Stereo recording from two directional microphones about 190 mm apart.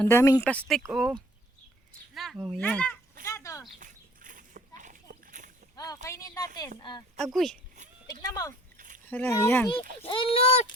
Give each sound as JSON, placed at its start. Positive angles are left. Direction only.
{"t": 0.0, "sound": "speech", "side_deg": 10}
{"t": 0.9, "sound": "speech", "side_deg": -5}
{"t": 2.1, "sound": "speech", "side_deg": 0}
{"t": 3.2, "sound": "a sound", "side_deg": 15}
{"t": 3.8, "sound": "bird flight", "side_deg": -45}
{"t": 4.8, "sound": "a sound", "side_deg": -40}
{"t": 5.7, "sound": "boat", "side_deg": 20}
{"t": 6.1, "sound": "speech", "side_deg": 15}
{"t": 7.2, "sound": "speech", "side_deg": 0}
{"t": 8.0, "sound": "a sound", "side_deg": 20}
{"t": 9.0, "sound": "speech", "side_deg": 10}
{"t": 10.0, "sound": "a child's voice", "side_deg": 30}